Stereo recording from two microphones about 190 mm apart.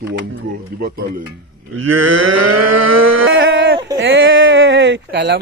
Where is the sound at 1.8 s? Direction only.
90° right; by 5.4 s 65° right (ahead or behind).